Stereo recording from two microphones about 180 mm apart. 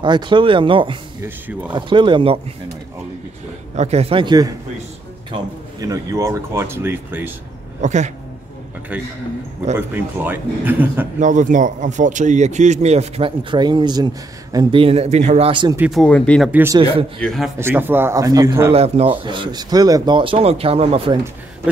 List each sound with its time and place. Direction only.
0.0 s speech: 25° right (ahead or behind)
1.2 s speech: 10° right (ahead or behind)
1.7 s speech: 25° right (ahead or behind)
3.7 s speech: 35° right (ahead or behind); by 7.3 s 10° right (ahead or behind)
7.8 s speech: 40° right (ahead or behind)
8.9 s speech: 5° right (ahead or behind)
11.1 s speech: 45° right (ahead or behind)
15.9 s speech: 5° left (ahead or behind)
16.5 s speech: 15° right (ahead or behind)
17.2 s speech: centre (ahead or behind)
17.6 s speech: 10° right (ahead or behind)
18.7 s speech: 35° right (ahead or behind)